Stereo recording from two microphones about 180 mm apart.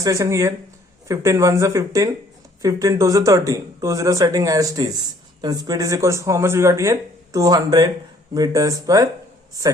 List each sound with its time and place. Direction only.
0.0 s speech: 15° right (ahead or behind)